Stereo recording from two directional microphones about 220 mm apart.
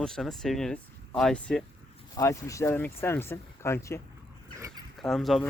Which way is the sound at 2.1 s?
15° left (ahead or behind).